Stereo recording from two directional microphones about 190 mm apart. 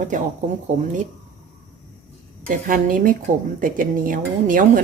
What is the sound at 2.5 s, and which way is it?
Speech, 45° right (ahead or behind).